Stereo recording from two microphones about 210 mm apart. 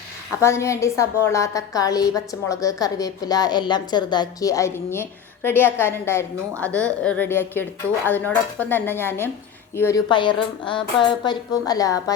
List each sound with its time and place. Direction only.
0.4 s a woman's voice: 15° left (ahead or behind)
10.1 s a woman's voice: 25° left (ahead or behind)